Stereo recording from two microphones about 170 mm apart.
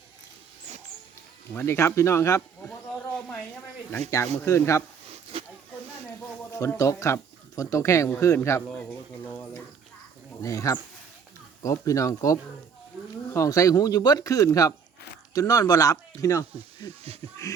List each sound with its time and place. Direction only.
1.5 s speech: 15° left (ahead or behind)
4.1 s speech: 15° left (ahead or behind)
5.3 s snake: 35° right (ahead or behind)
6.5 s speech: 20° left (ahead or behind)
10.4 s speech: 20° left (ahead or behind)